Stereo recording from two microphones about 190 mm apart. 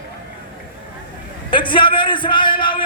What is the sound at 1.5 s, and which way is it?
A man's voice, 25° left (ahead or behind).